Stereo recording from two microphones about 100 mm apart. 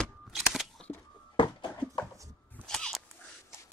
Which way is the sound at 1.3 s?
50° left (ahead or behind).